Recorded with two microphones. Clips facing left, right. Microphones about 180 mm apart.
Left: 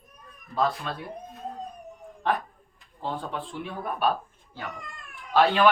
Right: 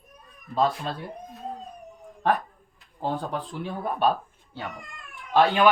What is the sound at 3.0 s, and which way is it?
Speech, 40° right (ahead or behind).